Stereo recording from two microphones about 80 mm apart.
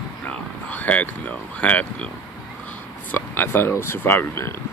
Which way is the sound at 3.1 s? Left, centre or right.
Left.